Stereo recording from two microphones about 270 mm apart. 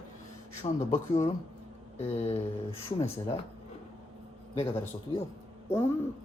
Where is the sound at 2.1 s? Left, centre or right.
Left.